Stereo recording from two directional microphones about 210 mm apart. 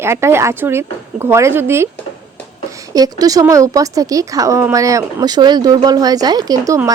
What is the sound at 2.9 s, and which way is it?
A woman's voice, 15° right (ahead or behind).